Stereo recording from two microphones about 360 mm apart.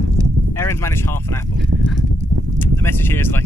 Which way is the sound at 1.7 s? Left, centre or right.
Right.